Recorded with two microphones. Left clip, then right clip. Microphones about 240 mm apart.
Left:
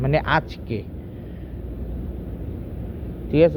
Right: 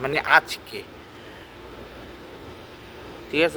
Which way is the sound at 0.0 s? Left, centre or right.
Centre.